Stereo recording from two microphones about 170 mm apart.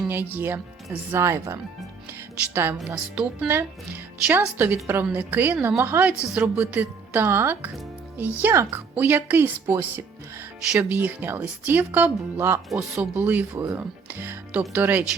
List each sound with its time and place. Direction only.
0.3 s a woman's voice: 15° right (ahead or behind)